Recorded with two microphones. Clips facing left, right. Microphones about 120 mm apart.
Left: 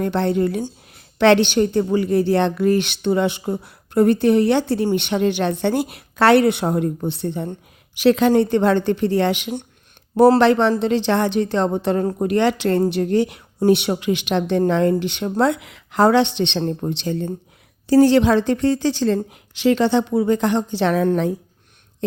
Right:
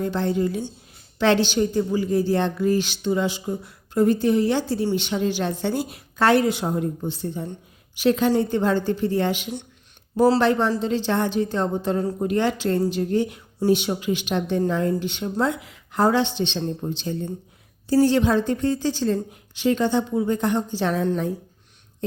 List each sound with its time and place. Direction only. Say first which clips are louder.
0.0 s a woman's voice: left 4 dB; 65° left (ahead or behind)